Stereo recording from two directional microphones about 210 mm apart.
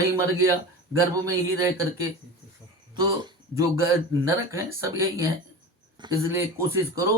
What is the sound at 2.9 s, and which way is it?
Speech, 20° right (ahead or behind).